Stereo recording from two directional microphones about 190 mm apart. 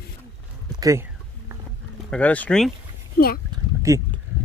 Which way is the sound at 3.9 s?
15° right (ahead or behind).